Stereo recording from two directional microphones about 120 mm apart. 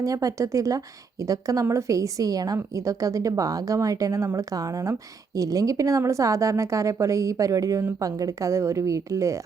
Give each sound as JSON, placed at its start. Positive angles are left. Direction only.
{"t": 0.0, "sound": "speech", "side_deg": -30}